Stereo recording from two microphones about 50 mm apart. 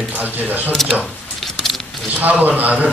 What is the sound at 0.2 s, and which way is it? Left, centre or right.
Speech, right.